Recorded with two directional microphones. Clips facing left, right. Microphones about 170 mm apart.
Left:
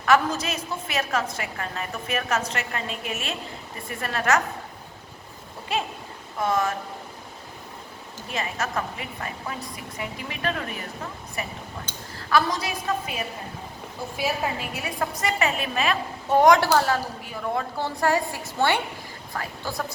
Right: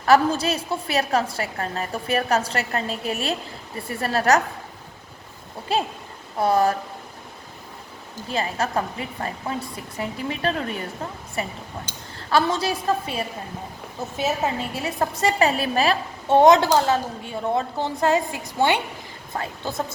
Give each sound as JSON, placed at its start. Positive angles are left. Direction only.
{"t": 0.0, "sound": "a woman's voice", "side_deg": -35}
{"t": 5.7, "sound": "a woman's voice", "side_deg": -35}
{"t": 8.3, "sound": "a woman's voice", "side_deg": -30}